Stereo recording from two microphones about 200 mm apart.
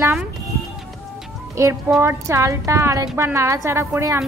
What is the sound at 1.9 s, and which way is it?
A woman's voice, 10° right (ahead or behind).